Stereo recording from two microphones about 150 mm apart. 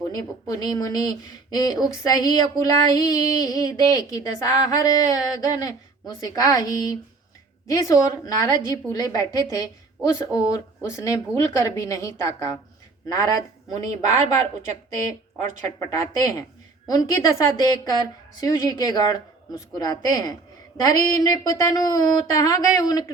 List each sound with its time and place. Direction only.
0.1 s speech: 25° left (ahead or behind)
16.0 s speech: 25° left (ahead or behind)